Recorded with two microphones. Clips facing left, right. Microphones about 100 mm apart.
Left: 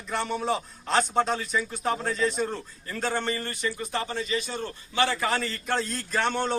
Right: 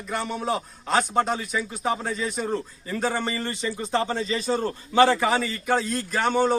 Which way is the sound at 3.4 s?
25° right (ahead or behind).